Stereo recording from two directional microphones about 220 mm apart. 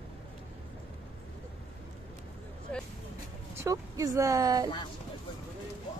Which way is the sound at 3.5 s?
15° right (ahead or behind).